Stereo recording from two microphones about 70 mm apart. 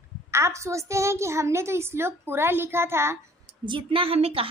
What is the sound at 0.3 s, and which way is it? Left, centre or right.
A woman's voice, right.